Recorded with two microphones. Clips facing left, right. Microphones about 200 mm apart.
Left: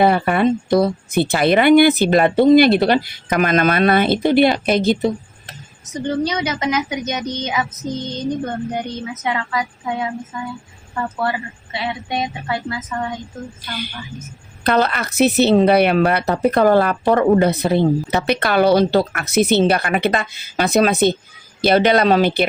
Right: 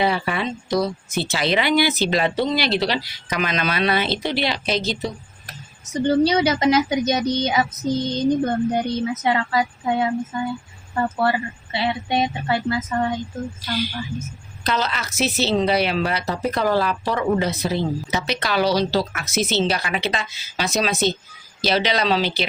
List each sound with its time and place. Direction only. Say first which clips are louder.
0.0 s speech: left 7 dB; 50° left (ahead or behind)
6.1 s a woman's voice: right 3 dB; 30° right (ahead or behind)
13.6 s a woman's voice: right 4 dB; 55° left (ahead or behind)